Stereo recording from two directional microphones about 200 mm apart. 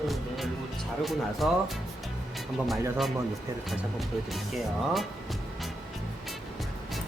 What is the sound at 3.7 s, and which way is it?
Speech, centre (ahead or behind).